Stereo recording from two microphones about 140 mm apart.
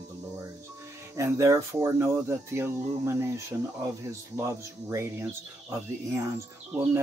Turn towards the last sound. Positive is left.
turn(degrees=-20)  # may be behind; listen again after turning